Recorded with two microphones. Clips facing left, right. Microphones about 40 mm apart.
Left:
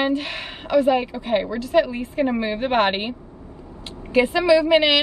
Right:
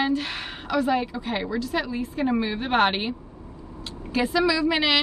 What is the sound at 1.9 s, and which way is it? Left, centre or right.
Speech, left.